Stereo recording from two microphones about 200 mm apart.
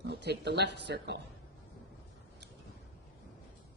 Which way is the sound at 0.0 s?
55° right (ahead or behind).